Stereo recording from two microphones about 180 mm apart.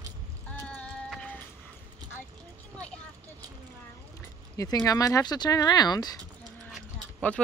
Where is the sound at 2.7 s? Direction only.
5° left (ahead or behind).